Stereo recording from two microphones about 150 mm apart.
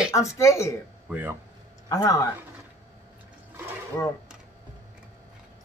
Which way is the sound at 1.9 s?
20° left (ahead or behind).